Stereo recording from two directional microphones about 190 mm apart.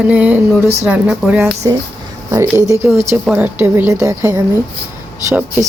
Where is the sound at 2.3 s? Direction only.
15° right (ahead or behind).